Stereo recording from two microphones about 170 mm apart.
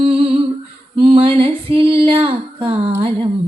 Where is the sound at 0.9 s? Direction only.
30° right (ahead or behind).